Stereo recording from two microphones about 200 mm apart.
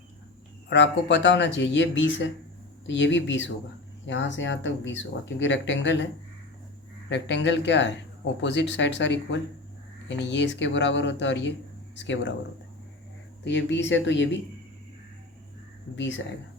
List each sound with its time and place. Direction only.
0.7 s speech: 60° left (ahead or behind)
7.1 s speech: 60° left (ahead or behind)
13.4 s speech: 65° left (ahead or behind)
16.0 s speech: 65° left (ahead or behind)